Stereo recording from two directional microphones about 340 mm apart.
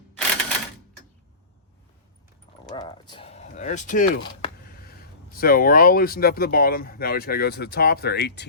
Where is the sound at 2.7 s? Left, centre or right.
Centre.